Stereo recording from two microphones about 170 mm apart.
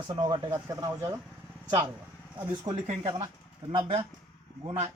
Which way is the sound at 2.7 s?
20° right (ahead or behind).